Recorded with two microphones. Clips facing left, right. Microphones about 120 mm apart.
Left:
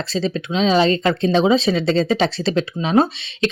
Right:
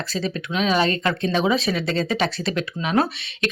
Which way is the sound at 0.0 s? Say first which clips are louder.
Left 4 dB; 25° left (ahead or behind).